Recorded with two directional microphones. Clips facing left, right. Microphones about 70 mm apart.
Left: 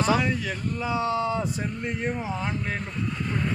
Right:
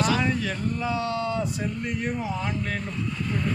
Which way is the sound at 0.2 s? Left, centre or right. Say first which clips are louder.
Right 1 dB; centre.